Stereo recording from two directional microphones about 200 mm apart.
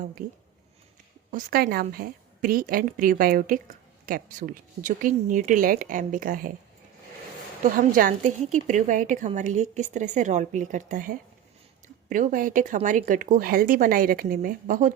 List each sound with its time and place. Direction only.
0.2 s a woman's voice: 40° right (ahead or behind)
7.6 s a woman's voice: 45° right (ahead or behind)